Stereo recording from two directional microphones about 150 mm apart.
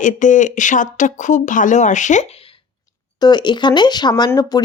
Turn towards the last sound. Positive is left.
turn(degrees=25)  # may be behind; listen again after turning